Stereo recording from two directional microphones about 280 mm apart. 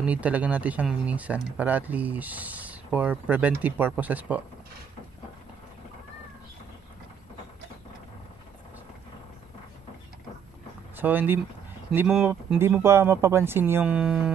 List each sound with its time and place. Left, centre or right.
0.0 s speech: centre
11.0 s speech: centre